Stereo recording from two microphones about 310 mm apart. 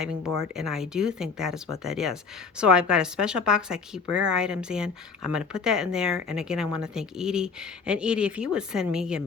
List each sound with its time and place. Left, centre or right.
0.0 s speech: centre